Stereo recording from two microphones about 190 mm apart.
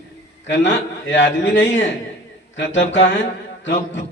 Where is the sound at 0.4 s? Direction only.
70° left (ahead or behind).